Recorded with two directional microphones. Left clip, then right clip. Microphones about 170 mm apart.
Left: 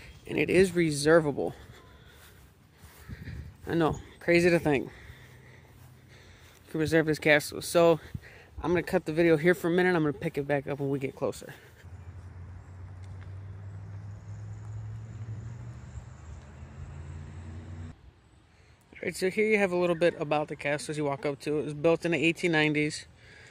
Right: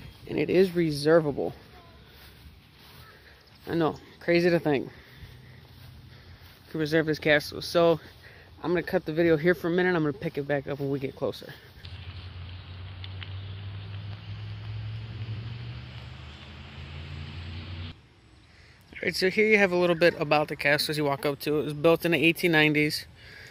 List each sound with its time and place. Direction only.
0.3 s speech: 10° left (ahead or behind)
1.0 s speech: 25° left (ahead or behind)
3.6 s speech: 30° left (ahead or behind)
6.7 s speech: 30° left (ahead or behind)
18.9 s speech: 5° left (ahead or behind)